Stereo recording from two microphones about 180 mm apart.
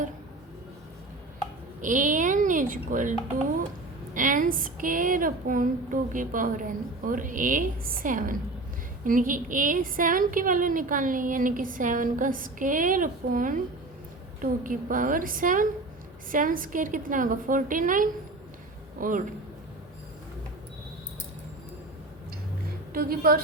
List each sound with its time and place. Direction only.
1.8 s a child's voice: 45° right (ahead or behind)
14.6 s a woman's voice: 50° right (ahead or behind)
22.9 s a woman's voice: 55° right (ahead or behind)